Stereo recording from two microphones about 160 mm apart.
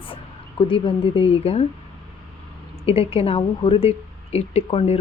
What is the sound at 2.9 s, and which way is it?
Speech, 35° left (ahead or behind).